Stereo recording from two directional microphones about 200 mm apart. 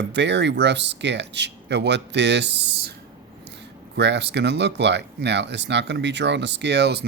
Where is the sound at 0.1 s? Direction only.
60° right (ahead or behind).